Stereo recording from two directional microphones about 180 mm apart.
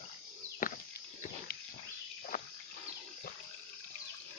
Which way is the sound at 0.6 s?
50° left (ahead or behind).